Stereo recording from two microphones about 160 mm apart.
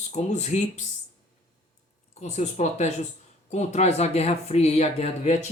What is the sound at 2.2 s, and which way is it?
Speech, 45° left (ahead or behind).